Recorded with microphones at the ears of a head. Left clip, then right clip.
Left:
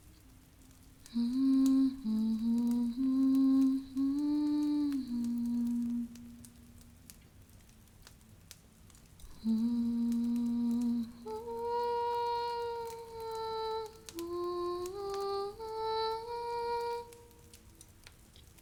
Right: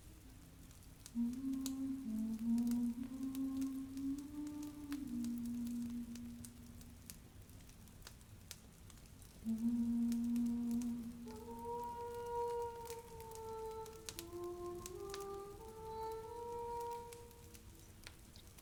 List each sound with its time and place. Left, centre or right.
1.1 s humming: left
9.4 s humming: left
14.2 s music: left